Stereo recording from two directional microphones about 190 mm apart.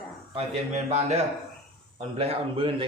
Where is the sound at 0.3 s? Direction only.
35° right (ahead or behind).